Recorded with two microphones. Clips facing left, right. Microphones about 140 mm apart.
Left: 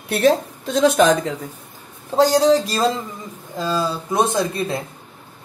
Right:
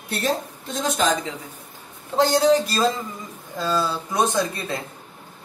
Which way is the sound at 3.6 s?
15° left (ahead or behind).